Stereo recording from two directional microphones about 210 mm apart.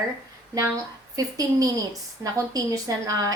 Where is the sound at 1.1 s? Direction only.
15° right (ahead or behind).